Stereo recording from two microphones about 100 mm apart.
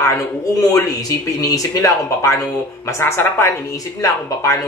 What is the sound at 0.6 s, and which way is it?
A woman's voice, 35° left (ahead or behind).